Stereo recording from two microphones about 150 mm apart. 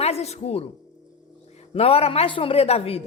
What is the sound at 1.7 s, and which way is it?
A woman's voice, 40° left (ahead or behind).